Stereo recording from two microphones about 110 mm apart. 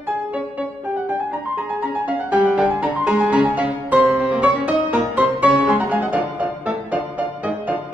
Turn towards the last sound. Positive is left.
turn(degrees=-15)  # may be behind; listen again after turning